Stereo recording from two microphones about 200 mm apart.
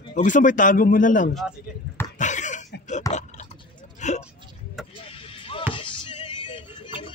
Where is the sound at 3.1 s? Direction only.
35° left (ahead or behind).